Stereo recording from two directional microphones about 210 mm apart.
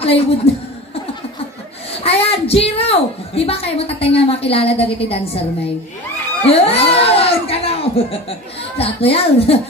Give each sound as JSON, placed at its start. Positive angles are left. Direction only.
{"t": 0.5, "sound": "a woman's voice", "side_deg": 30}
{"t": 2.0, "sound": "a woman's voice", "side_deg": 30}
{"t": 6.4, "sound": "a sound", "side_deg": 30}
{"t": 8.7, "sound": "a woman's voice", "side_deg": 30}